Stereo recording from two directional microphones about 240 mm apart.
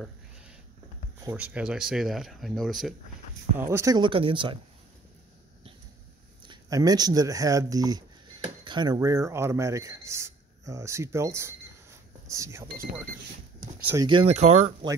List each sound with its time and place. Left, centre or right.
1.2 s speech: centre
3.5 s speech: centre
6.4 s speech: centre
13.8 s speech: centre